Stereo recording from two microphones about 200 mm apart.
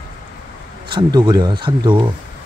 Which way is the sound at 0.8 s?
25° right (ahead or behind).